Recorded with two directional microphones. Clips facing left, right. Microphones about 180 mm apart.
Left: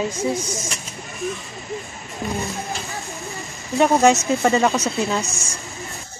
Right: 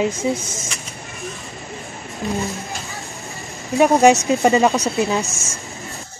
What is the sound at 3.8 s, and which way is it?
Speech, 15° right (ahead or behind).